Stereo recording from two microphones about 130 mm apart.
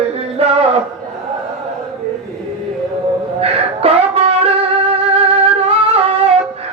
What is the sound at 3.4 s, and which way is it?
Music, 50° right (ahead or behind).